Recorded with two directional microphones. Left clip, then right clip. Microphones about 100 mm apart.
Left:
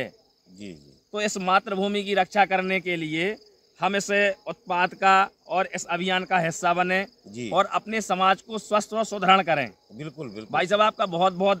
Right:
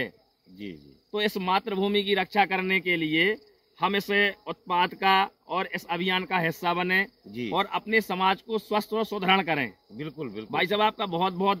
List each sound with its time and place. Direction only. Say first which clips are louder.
0.6 s speech: right 1 dB; 50° left (ahead or behind)